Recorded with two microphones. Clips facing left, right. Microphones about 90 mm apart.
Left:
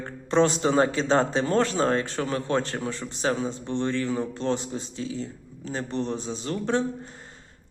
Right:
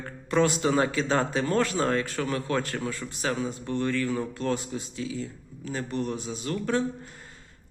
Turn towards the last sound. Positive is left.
turn(degrees=30)  # may be behind; listen again after turning